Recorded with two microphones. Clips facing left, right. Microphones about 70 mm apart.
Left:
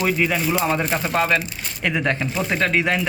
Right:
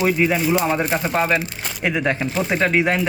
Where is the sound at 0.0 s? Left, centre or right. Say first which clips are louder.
Right 2 dB; centre.